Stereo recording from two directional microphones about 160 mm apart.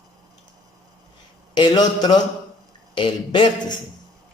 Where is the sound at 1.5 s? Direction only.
25° left (ahead or behind).